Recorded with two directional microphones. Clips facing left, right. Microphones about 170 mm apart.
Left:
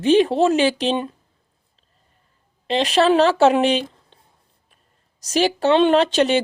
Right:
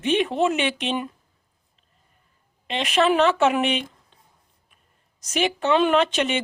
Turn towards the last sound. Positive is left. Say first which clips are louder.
# left 5 dB
turn(degrees=35)  # may be behind; listen again after turning